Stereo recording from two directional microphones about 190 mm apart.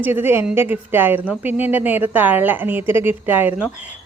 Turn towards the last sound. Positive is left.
turn(degrees=-10)  # may be behind; listen again after turning